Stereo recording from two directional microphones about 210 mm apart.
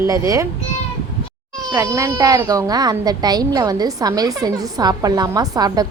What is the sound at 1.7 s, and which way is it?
A woman's voice, 15° right (ahead or behind).